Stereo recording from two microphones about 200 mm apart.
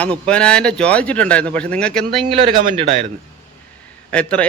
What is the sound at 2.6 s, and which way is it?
Speech, 35° right (ahead or behind).